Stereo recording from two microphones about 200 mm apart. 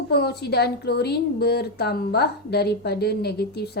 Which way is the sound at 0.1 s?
55° left (ahead or behind).